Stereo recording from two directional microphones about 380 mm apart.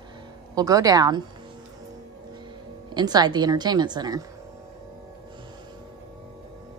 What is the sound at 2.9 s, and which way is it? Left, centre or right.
A woman's voice, centre.